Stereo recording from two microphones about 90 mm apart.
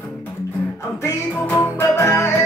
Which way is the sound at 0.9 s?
35° left (ahead or behind).